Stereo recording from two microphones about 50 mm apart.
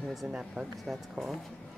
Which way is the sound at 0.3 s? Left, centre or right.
Centre.